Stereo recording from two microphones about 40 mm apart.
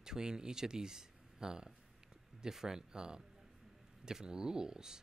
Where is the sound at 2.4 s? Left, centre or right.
Centre.